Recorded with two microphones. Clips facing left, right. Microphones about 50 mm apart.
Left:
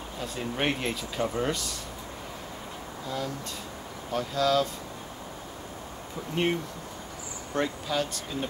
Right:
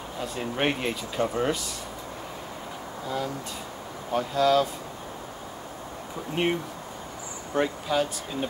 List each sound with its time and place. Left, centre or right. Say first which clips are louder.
0.2 s speech: right 2 dB; centre
4.1 s speech: right 3 dB; centre
6.4 s speech: right 1 dB; centre